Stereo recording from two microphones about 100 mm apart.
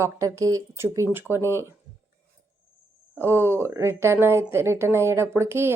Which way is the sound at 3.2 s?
25° right (ahead or behind).